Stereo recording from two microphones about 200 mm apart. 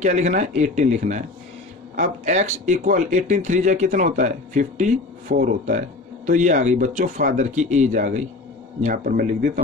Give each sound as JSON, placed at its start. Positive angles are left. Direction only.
{"t": 0.0, "sound": "a man's voice", "side_deg": -35}